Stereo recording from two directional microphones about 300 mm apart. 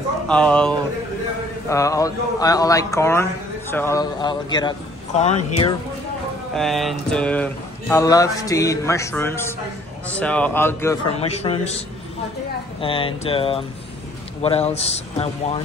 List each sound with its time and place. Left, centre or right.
0.3 s a man's voice: centre
6.5 s a man's voice: centre
11.1 s speech: centre
12.8 s speech: centre